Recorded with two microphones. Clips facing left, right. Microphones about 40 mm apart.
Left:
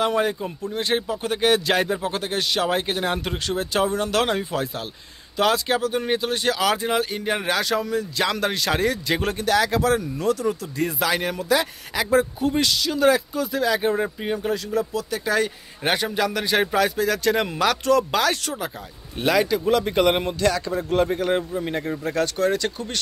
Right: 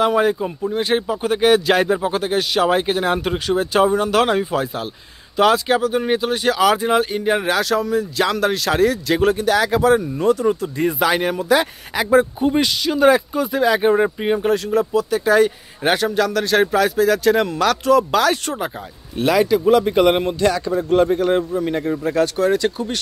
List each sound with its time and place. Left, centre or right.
0.0 s speech: centre; by 13.9 s right
13.9 s speech: right
14.9 s speech: centre
16.3 s speech: centre
16.7 s speech: centre